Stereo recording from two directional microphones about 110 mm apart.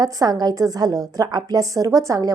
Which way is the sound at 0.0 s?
35° right (ahead or behind).